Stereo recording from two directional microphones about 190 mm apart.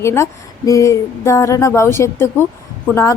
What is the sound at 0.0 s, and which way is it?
A woman's voice, 15° left (ahead or behind).